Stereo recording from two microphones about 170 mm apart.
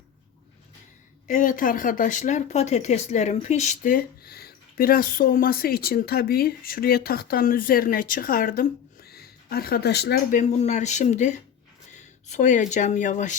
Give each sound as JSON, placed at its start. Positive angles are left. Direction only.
{"t": 1.3, "sound": "speech", "side_deg": 50}
{"t": 10.3, "sound": "speech", "side_deg": 45}